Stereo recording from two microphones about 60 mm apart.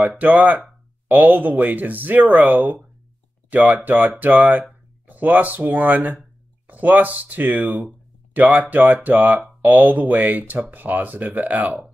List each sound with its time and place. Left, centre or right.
0.2 s speech: right